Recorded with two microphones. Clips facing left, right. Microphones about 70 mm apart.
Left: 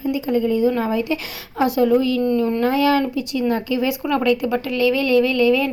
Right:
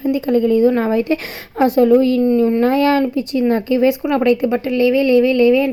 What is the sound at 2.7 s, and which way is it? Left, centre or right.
Speech, right.